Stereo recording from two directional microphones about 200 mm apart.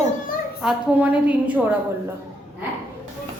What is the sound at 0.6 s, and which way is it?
Speech, 5° right (ahead or behind).